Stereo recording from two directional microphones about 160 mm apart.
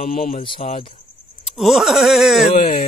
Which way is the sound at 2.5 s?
45° left (ahead or behind).